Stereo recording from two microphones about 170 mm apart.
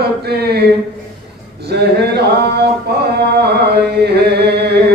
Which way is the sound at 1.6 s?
70° right (ahead or behind).